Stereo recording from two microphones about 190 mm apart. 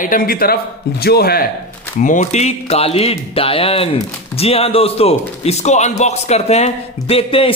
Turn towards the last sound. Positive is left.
turn(degrees=30)  # may be behind; listen again after turning